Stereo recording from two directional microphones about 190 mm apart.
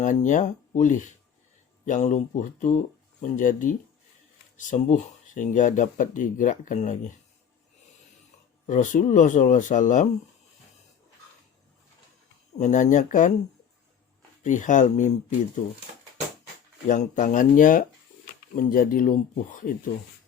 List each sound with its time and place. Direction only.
0.0 s speech: 40° left (ahead or behind)
8.6 s speech: 40° left (ahead or behind)
12.5 s speech: 40° left (ahead or behind)
14.4 s speech: 40° left (ahead or behind)
16.8 s speech: 40° left (ahead or behind)